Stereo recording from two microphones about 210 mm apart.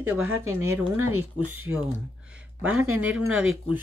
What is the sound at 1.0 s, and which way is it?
Speech, 90° right.